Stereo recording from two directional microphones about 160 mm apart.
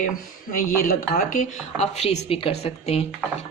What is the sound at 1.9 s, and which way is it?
A woman's voice, 40° left (ahead or behind).